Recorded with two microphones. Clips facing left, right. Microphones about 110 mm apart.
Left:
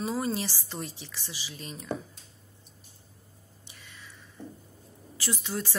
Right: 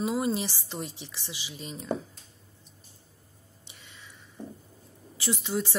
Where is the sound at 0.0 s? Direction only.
15° right (ahead or behind).